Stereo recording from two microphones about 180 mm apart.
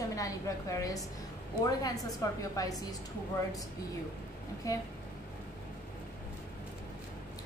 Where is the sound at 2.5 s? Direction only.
20° left (ahead or behind).